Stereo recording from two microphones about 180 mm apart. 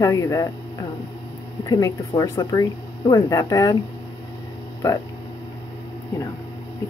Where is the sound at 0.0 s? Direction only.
20° left (ahead or behind).